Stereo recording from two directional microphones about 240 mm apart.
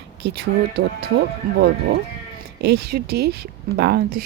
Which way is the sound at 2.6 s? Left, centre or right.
Right.